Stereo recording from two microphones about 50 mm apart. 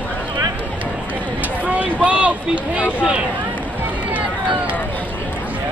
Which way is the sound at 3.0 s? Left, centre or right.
Centre.